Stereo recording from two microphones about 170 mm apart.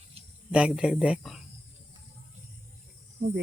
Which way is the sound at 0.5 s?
5° right (ahead or behind).